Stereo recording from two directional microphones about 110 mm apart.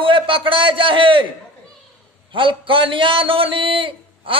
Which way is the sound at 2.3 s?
50° right (ahead or behind).